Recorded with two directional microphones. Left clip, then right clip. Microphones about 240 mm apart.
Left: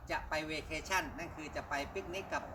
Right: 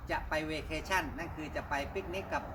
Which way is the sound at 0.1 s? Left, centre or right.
Centre.